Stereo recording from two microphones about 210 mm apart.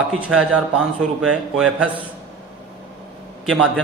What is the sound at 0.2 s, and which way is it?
A man's voice, 5° right (ahead or behind).